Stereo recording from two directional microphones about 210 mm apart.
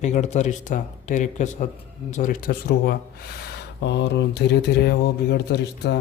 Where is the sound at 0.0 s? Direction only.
35° left (ahead or behind).